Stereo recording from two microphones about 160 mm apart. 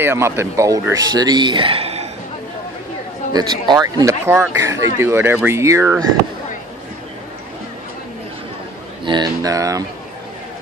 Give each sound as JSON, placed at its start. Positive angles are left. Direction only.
{"t": 0.0, "sound": "speech", "side_deg": -15}
{"t": 3.3, "sound": "speech", "side_deg": -25}
{"t": 9.0, "sound": "speech", "side_deg": -25}